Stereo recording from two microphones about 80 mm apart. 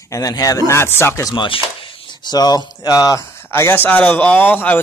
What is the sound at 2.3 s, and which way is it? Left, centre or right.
Speech, left.